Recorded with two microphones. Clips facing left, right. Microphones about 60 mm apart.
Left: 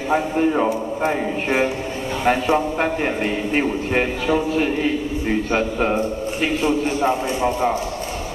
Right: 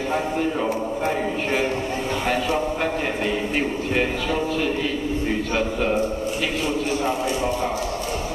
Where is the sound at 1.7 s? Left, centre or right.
Centre.